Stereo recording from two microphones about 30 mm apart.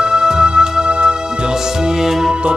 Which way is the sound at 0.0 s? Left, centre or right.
Right.